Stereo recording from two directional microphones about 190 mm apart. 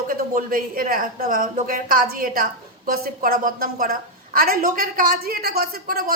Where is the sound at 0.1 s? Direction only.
50° right (ahead or behind).